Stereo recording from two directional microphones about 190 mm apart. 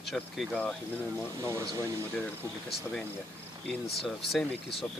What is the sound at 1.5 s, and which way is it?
Speech, 15° right (ahead or behind).